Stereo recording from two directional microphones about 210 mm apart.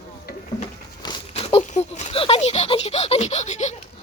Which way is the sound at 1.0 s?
25° left (ahead or behind).